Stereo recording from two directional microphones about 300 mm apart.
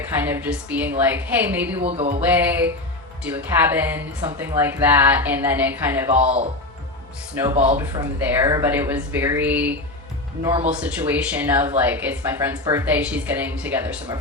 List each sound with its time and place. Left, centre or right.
0.2 s speech: centre
1.8 s music: right
2.2 s speech: centre
7.8 s speech: centre
10.4 s speech: centre
10.7 s speech: centre